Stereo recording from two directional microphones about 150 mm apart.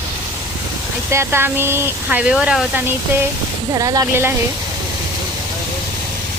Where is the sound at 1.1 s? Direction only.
15° right (ahead or behind).